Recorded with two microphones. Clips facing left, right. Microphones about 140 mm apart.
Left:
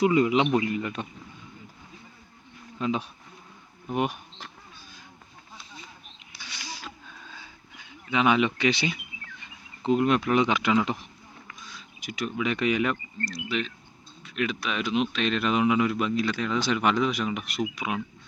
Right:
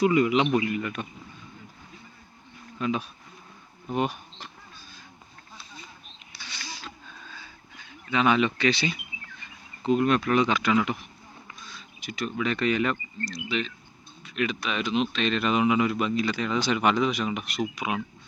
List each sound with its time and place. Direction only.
0.0 s speech: 25° left (ahead or behind)
2.7 s speech: 20° left (ahead or behind)
6.4 s a sound: 10° left (ahead or behind)
9.4 s speech: 20° left (ahead or behind)
11.6 s speech: 10° left (ahead or behind)